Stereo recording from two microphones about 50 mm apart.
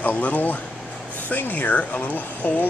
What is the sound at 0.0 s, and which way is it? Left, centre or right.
Speech, left.